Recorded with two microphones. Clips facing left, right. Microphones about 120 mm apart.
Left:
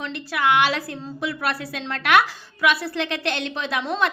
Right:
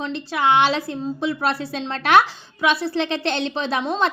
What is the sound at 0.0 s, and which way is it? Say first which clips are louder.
A woman's voice: right 2 dB; 25° right (ahead or behind).